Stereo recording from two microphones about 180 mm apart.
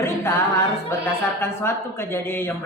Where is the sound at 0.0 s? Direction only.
15° left (ahead or behind).